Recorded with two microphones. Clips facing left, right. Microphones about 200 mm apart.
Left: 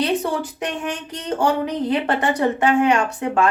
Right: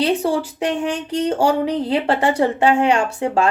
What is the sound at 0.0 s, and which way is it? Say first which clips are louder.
A child's voice: right 3 dB; 30° right (ahead or behind).